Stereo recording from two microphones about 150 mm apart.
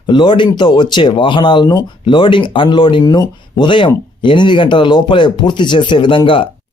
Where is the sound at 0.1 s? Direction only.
30° left (ahead or behind).